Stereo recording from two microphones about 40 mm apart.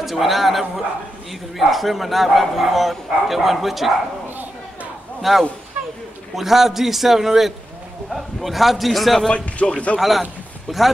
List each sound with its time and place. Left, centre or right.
0.0 s speech: centre
5.2 s a man's voice: centre
9.3 s a man's voice: left
9.9 s speech: centre